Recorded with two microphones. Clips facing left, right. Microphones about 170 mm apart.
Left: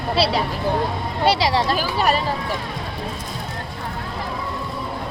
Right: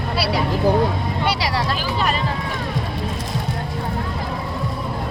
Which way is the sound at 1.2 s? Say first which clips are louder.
Left 6 dB; 25° left (ahead or behind).